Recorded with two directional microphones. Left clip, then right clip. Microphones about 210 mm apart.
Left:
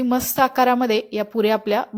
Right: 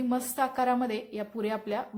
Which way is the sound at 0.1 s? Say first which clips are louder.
Left 11 dB; 35° left (ahead or behind).